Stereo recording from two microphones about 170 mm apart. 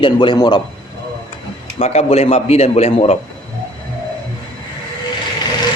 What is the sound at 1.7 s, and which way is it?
Speech, 40° left (ahead or behind).